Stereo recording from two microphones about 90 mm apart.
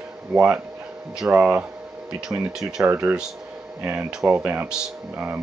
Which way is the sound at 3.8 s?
20° right (ahead or behind).